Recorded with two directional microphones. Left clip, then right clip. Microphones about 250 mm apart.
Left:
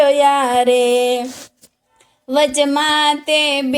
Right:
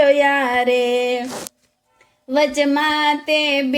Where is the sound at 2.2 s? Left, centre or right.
Left.